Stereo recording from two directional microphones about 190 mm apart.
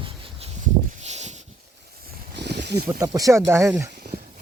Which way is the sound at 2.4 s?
60° right (ahead or behind).